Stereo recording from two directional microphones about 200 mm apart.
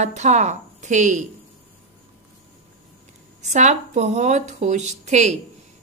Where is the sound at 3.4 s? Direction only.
35° right (ahead or behind).